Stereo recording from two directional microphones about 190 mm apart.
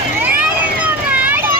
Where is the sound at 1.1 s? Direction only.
10° right (ahead or behind).